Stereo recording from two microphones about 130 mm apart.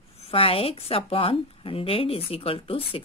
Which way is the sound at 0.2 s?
45° left (ahead or behind).